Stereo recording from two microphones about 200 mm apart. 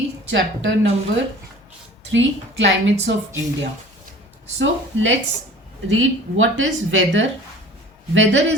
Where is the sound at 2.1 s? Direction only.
65° right (ahead or behind).